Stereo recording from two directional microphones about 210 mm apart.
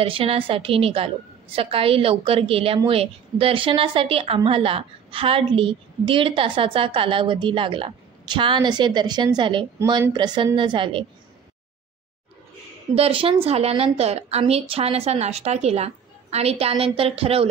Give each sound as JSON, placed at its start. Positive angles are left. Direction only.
{"t": 0.0, "sound": "a woman's voice", "side_deg": -25}
{"t": 12.9, "sound": "a woman's voice", "side_deg": -25}